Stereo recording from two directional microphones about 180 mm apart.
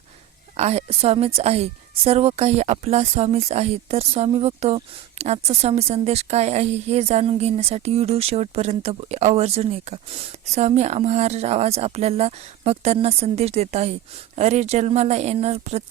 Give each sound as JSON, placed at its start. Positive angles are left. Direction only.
{"t": 0.5, "sound": "a woman's voice", "side_deg": -35}